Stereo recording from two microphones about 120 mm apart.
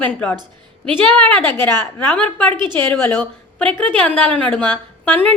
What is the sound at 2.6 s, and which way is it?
Speech, 40° right (ahead or behind).